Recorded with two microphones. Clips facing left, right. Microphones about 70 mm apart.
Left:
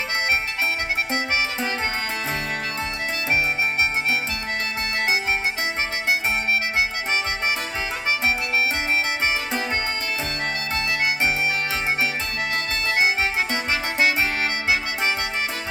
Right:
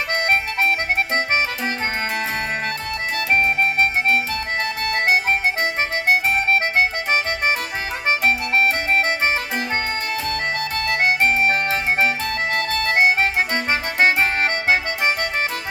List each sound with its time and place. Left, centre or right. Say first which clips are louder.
3.3 s harmonica: right 5 dB; right
7.1 s music: right 4 dB; right
11.3 s music: right 5 dB; right
12.9 s music: right 4 dB; right